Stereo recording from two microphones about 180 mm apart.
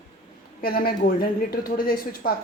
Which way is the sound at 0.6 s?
55° left (ahead or behind).